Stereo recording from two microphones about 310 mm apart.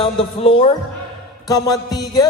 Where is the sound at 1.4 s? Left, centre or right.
Centre.